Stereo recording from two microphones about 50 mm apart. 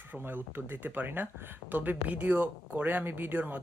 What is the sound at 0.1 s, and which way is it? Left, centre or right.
Speech, right.